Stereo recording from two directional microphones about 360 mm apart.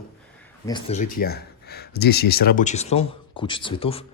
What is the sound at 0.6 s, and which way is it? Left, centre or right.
Speech, centre.